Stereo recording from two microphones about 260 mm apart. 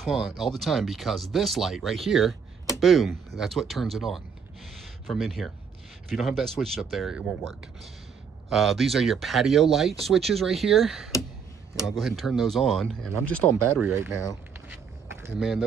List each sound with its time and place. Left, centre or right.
0.0 s speech: centre
13.8 s speech: centre
15.2 s speech: centre